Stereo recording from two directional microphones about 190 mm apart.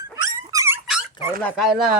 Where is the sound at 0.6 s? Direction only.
10° right (ahead or behind).